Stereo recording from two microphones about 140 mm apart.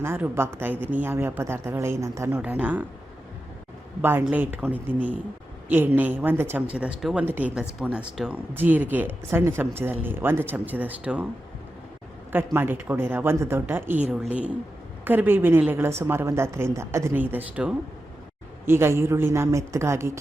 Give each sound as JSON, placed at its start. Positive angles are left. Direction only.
{"t": 0.0, "sound": "speech", "side_deg": -15}
{"t": 4.0, "sound": "speech", "side_deg": -15}
{"t": 12.3, "sound": "speech", "side_deg": -15}